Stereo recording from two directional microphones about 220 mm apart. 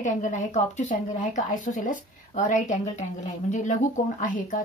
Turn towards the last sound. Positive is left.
turn(degrees=35)  # may be behind; listen again after turning